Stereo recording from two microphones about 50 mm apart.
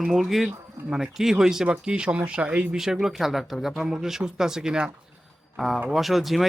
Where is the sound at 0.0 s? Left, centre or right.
Centre.